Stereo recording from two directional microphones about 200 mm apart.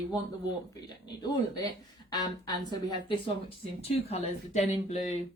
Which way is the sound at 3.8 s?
30° left (ahead or behind).